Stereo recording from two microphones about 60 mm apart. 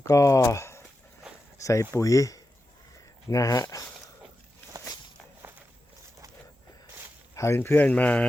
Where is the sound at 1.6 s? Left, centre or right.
Left.